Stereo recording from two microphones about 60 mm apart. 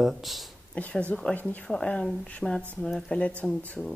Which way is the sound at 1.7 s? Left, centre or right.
Centre.